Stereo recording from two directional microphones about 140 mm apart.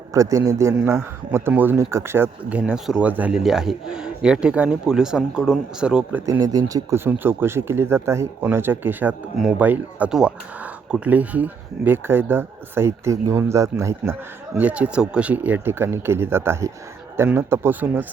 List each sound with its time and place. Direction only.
0.1 s a man's voice: 25° right (ahead or behind)
6.2 s speech: 25° right (ahead or behind)